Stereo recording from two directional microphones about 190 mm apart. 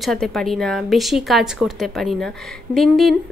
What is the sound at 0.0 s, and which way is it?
A woman's voice, centre (ahead or behind).